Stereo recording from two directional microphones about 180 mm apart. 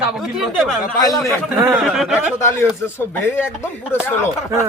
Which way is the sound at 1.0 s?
20° left (ahead or behind).